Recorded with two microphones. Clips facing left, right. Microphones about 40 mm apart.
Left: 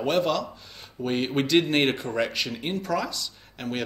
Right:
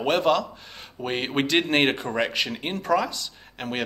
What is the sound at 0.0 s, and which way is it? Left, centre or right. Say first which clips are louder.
Speech: right 3 dB; right.